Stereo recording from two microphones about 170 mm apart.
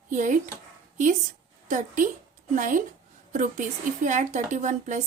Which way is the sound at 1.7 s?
50° right (ahead or behind).